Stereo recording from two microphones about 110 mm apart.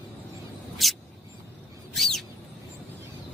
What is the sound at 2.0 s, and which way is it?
Bird, 5° left (ahead or behind).